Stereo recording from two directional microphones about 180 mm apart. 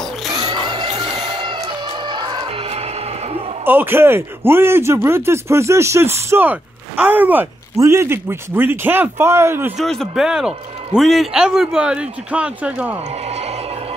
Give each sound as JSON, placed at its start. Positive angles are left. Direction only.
{"t": 0.3, "sound": "a sound", "side_deg": -20}
{"t": 3.6, "sound": "speech", "side_deg": -10}
{"t": 9.8, "sound": "a man's voice", "side_deg": 0}